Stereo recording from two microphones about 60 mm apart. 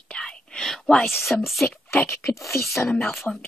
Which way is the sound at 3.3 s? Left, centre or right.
Centre.